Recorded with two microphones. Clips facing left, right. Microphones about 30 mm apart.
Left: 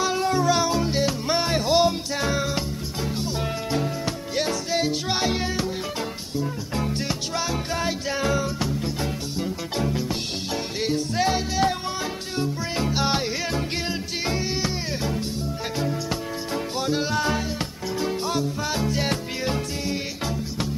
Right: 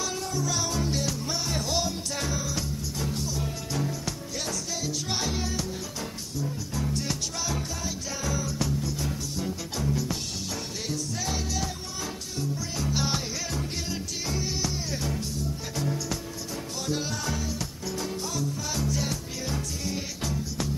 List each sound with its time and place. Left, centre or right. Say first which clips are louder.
0.0 s music: left 9 dB; left
0.3 s music: left 10 dB; left
0.6 s music: left 7 dB; left
7.1 s music: left 5 dB; left
7.8 s music: left 8 dB; left
16.8 s music: left 7 dB; left